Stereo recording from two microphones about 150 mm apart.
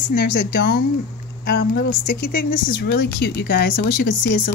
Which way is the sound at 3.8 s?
65° left (ahead or behind).